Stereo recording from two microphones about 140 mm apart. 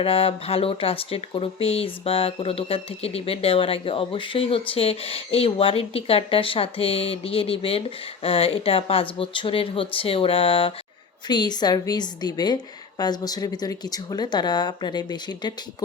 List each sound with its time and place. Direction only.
0.0 s speech: 40° left (ahead or behind)
11.3 s speech: 30° left (ahead or behind)